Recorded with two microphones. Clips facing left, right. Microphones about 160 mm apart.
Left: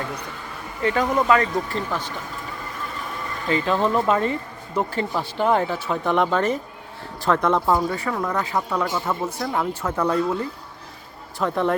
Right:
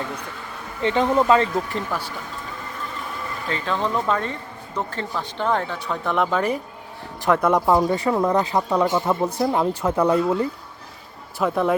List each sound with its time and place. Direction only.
0.8 s speech: 25° right (ahead or behind)
1.9 s speech: 10° right (ahead or behind)
3.5 s speech: 10° left (ahead or behind)
6.3 s speech: 10° right (ahead or behind)
11.3 s speech: 5° right (ahead or behind)